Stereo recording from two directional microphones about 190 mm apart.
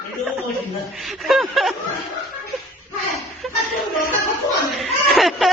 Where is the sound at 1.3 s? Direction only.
Centre (ahead or behind).